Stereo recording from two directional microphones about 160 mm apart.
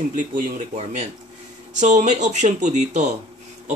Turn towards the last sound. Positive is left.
turn(degrees=-45)  # may be behind; listen again after turning